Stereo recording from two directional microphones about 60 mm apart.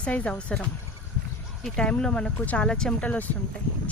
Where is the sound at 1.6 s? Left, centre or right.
Centre.